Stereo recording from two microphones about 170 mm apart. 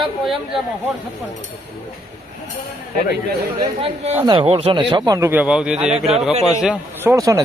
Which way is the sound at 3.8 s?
35° right (ahead or behind).